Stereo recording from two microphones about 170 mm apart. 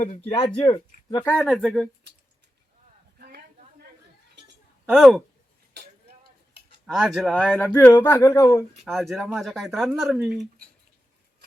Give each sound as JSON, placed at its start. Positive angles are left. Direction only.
{"t": 0.3, "sound": "speech", "side_deg": 30}
{"t": 1.2, "sound": "speech", "side_deg": 5}
{"t": 3.2, "sound": "a sound", "side_deg": -65}
{"t": 4.9, "sound": "speech", "side_deg": 0}
{"t": 5.7, "sound": "a sound", "side_deg": -80}
{"t": 6.8, "sound": "speech", "side_deg": -5}
{"t": 7.5, "sound": "speech", "side_deg": 10}
{"t": 8.8, "sound": "speech", "side_deg": 0}